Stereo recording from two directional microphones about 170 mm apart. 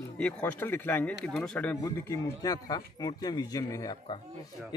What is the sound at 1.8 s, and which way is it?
A man's voice, 20° left (ahead or behind).